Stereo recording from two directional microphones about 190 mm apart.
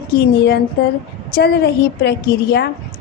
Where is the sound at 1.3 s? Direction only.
60° left (ahead or behind).